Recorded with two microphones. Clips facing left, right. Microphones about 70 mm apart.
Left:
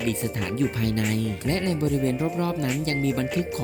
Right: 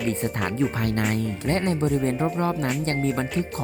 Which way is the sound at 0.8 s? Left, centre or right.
Right.